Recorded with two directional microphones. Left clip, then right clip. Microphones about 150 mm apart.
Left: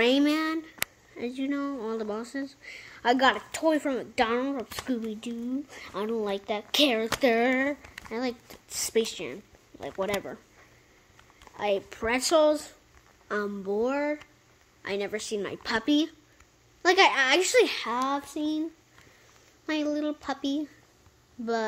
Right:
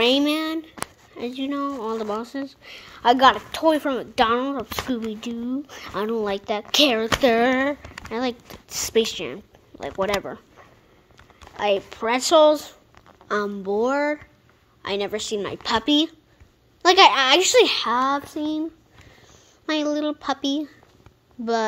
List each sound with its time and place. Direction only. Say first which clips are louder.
0.0 s a woman's voice: right 4 dB; centre (ahead or behind); by 10.4 s 15° right (ahead or behind)
11.5 s speech: right 6 dB; 10° right (ahead or behind)
11.9 s a woman's voice: right 6 dB; 5° left (ahead or behind)
12.4 s speech: right 8 dB; 15° right (ahead or behind)